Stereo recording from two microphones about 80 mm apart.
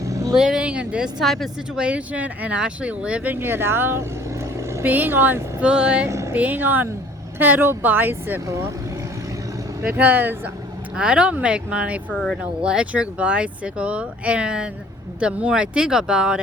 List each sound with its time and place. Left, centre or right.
0.0 s vehicle: right
0.3 s speech: centre
1.2 s speech: centre
1.8 s speech: centre
3.3 s speech: right
5.6 s speech: centre
8.4 s speech: right
9.8 s speech: right
10.9 s speech: centre
12.1 s speech: centre
12.4 s speech: centre